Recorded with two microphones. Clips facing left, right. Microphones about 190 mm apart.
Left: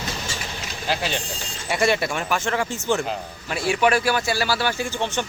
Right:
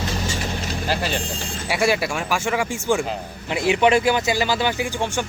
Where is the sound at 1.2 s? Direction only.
55° right (ahead or behind).